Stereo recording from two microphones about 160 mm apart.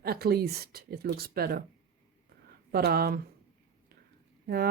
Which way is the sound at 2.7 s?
75° right (ahead or behind).